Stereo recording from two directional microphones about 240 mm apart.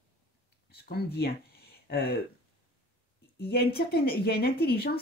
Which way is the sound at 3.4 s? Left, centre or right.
Left.